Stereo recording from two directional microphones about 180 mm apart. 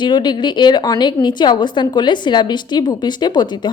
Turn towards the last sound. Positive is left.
turn(degrees=25)  # may be behind; listen again after turning